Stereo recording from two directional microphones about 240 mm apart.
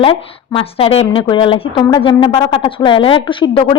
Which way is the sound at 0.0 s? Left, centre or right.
Left.